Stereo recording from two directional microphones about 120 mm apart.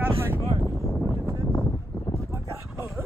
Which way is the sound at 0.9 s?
10° left (ahead or behind).